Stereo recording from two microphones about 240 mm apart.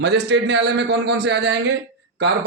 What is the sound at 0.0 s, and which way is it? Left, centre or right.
A man's voice, right.